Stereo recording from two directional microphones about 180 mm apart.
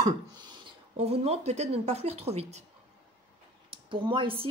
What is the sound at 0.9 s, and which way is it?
Speech, 35° right (ahead or behind).